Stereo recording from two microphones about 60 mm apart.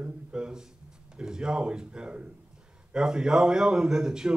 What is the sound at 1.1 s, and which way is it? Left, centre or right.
A man's voice, centre.